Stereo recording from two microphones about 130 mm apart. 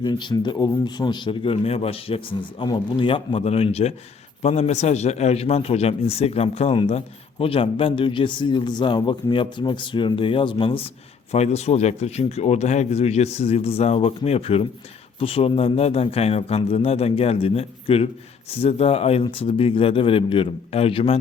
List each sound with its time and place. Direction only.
0.0 s speech: 35° left (ahead or behind)
2.6 s a man's voice: 35° left (ahead or behind)
11.3 s a man's voice: 60° left (ahead or behind)